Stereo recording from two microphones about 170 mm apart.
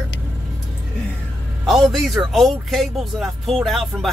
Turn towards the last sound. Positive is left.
turn(degrees=0)  # may be behind; listen again after turning